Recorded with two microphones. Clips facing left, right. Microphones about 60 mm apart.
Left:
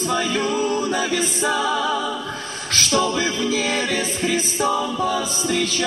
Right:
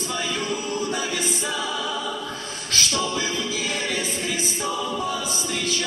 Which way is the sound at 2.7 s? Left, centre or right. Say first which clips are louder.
Left 5 dB; left.